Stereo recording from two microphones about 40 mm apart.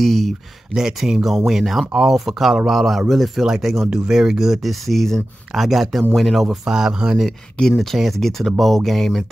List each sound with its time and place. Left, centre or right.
0.0 s speech: centre
0.7 s speech: centre
3.9 s speech: centre
4.6 s speech: centre
5.5 s speech: centre
6.6 s speech: centre
7.6 s speech: left
8.2 s speech: centre